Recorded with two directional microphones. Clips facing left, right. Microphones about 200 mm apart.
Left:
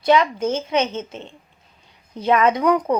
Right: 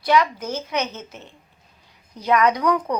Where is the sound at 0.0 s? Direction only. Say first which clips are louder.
Left 3 dB; 25° left (ahead or behind).